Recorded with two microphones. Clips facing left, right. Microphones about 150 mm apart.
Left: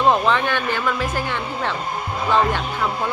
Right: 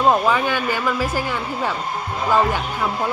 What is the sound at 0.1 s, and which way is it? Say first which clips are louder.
Speech: even; 5° right (ahead or behind).